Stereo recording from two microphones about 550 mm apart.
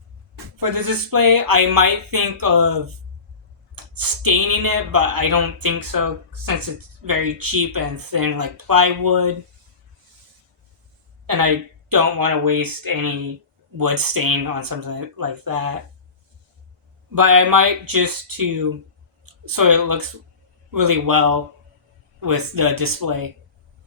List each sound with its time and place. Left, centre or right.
0.6 s speech: right
11.3 s speech: right
17.2 s speech: right